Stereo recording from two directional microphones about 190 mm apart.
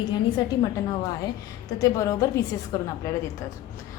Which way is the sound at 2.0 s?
15° left (ahead or behind).